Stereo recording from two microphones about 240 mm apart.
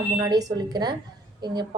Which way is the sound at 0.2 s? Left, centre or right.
Centre.